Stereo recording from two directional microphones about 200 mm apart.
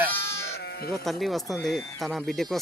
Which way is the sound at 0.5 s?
55° left (ahead or behind).